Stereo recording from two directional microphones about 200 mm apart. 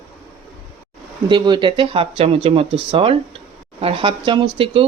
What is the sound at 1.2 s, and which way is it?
Speech, 25° right (ahead or behind).